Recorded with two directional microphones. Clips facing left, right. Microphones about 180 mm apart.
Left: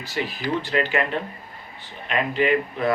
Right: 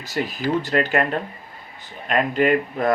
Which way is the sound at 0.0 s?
45° right (ahead or behind).